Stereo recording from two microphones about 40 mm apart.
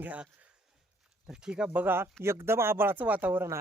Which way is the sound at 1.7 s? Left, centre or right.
Right.